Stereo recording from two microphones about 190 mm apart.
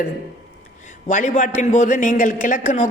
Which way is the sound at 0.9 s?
40° left (ahead or behind).